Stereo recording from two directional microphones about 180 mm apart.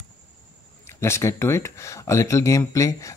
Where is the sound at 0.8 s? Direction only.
15° left (ahead or behind).